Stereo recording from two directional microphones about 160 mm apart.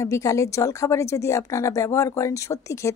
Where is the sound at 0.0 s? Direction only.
20° left (ahead or behind).